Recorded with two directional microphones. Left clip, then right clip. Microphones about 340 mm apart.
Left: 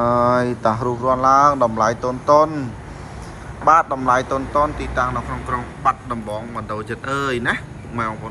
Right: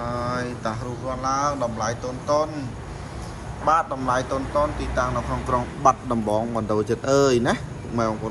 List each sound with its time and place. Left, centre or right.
0.3 s speech: centre
3.6 s speech: centre
5.9 s speech: centre